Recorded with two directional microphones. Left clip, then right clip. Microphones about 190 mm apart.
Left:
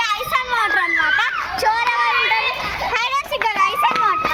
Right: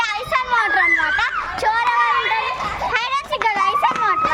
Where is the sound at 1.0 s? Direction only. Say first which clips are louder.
Left 1 dB; 5° right (ahead or behind).